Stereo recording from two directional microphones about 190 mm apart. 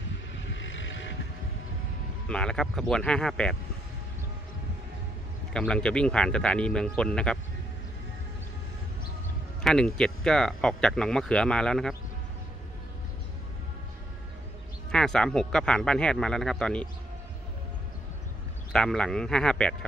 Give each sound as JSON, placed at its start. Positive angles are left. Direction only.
{"t": 0.6, "sound": "vehicle", "side_deg": 80}
{"t": 2.2, "sound": "speech", "side_deg": 5}
{"t": 5.5, "sound": "speech", "side_deg": 5}
{"t": 9.6, "sound": "speech", "side_deg": 5}
{"t": 14.9, "sound": "speech", "side_deg": 5}
{"t": 18.7, "sound": "speech", "side_deg": 5}